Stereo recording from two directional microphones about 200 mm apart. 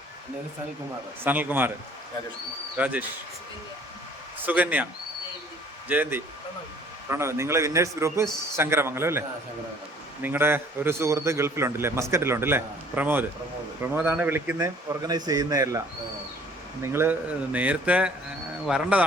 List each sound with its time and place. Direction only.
1.2 s a man's voice: 10° right (ahead or behind)
2.7 s a man's voice: 5° right (ahead or behind)
4.4 s speech: 10° right (ahead or behind)
5.9 s a man's voice: 10° right (ahead or behind)
10.2 s a man's voice: 10° right (ahead or behind)
16.8 s a man's voice: 10° right (ahead or behind)